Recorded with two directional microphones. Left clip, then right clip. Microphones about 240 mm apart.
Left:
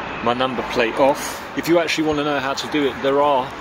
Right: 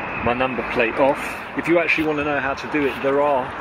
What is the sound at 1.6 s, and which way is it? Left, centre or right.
Speech, centre.